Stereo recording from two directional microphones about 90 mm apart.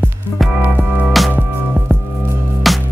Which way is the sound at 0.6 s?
20° right (ahead or behind).